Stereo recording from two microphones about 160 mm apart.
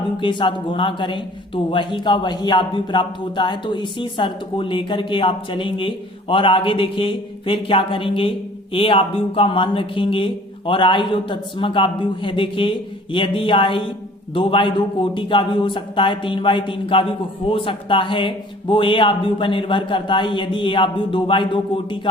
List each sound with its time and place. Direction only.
0.2 s a man's voice: 30° left (ahead or behind)